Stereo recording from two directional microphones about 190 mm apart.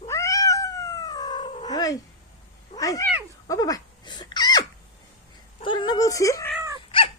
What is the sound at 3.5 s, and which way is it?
Dog, 20° left (ahead or behind).